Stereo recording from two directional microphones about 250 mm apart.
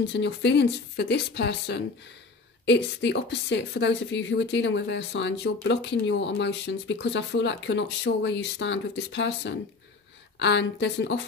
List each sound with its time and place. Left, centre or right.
0.1 s a woman's voice: left